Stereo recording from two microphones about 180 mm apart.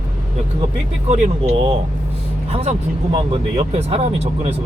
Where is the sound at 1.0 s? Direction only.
40° right (ahead or behind).